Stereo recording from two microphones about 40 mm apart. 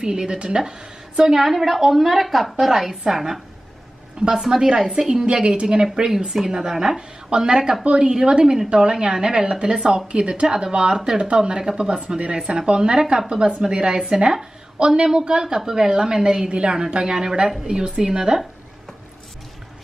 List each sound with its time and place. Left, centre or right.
0.0 s a woman's voice: centre
1.3 s a woman's voice: centre
7.0 s a woman's voice: right